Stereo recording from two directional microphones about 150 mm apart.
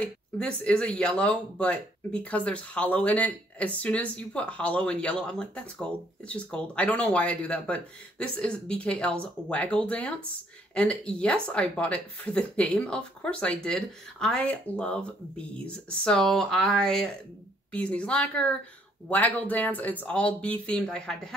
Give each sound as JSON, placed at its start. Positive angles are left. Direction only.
{"t": 0.0, "sound": "speech", "side_deg": 5}